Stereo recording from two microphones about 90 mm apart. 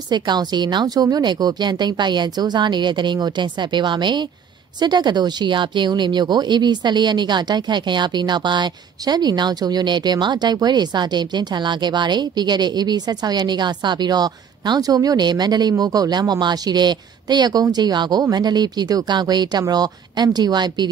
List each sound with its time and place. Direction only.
0.1 s a woman's voice: 55° right (ahead or behind)